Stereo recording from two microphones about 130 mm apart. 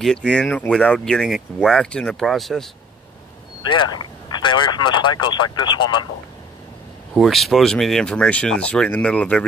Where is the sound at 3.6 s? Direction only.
35° left (ahead or behind).